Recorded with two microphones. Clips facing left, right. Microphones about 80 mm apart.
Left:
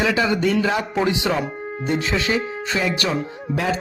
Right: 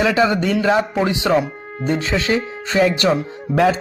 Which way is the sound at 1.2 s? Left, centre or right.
Right.